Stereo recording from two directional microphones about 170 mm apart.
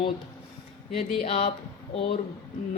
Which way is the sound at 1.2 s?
40° left (ahead or behind).